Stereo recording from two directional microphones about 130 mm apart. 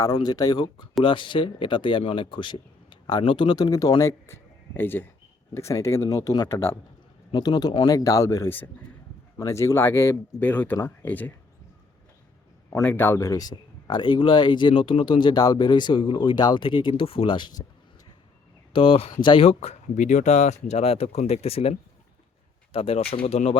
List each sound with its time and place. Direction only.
0.0 s speech: 30° left (ahead or behind)
7.3 s speech: 35° left (ahead or behind); by 11.3 s 15° left (ahead or behind)
12.8 s speech: 15° left (ahead or behind); by 17.7 s 35° left (ahead or behind)
18.7 s speech: 45° left (ahead or behind)
19.5 s speech: 55° left (ahead or behind)